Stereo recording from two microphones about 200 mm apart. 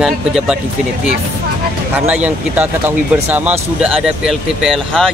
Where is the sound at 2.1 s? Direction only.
5° right (ahead or behind).